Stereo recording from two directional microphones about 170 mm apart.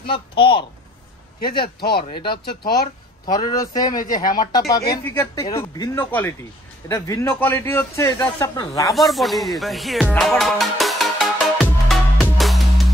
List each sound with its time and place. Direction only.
0.0 s speech: 30° left (ahead or behind)
1.8 s speech: 65° left (ahead or behind)
3.3 s speech: 25° left (ahead or behind)
4.0 s speech: 55° left (ahead or behind)
4.4 s speech: 20° left (ahead or behind)
8.9 s music: centre (ahead or behind)